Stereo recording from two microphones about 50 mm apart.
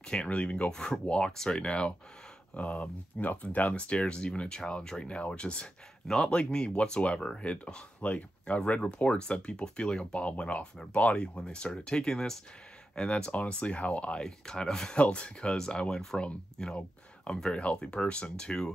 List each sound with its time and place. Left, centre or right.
0.1 s speech: left
6.0 s speech: centre; by 11.2 s left
11.3 s speech: centre
14.2 s speech: centre